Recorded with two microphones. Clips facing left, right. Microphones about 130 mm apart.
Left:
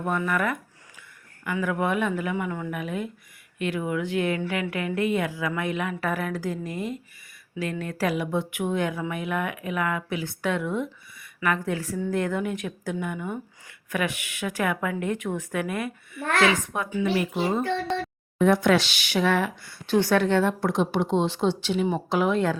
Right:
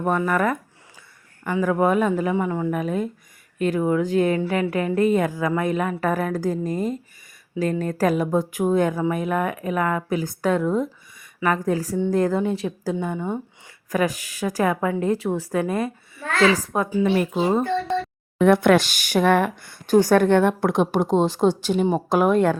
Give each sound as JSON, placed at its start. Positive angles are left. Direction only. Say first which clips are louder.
{"t": 0.0, "sound": "a woman's voice", "louder": "right 5 dB", "side_deg": -40}
{"t": 18.3, "sound": "speech", "louder": "right 4 dB", "side_deg": -60}